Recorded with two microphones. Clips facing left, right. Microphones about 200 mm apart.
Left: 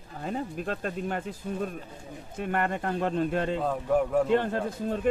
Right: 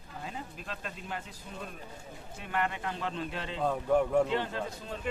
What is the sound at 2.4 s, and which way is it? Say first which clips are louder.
Speech: left 5 dB; 50° left (ahead or behind).